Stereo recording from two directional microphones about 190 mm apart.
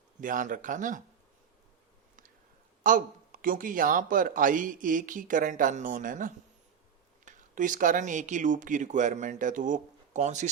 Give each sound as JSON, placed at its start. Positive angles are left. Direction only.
{"t": 0.2, "sound": "speech", "side_deg": -45}
{"t": 2.8, "sound": "speech", "side_deg": -45}